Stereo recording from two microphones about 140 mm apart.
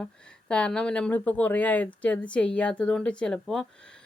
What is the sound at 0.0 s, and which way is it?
Speech, 5° left (ahead or behind).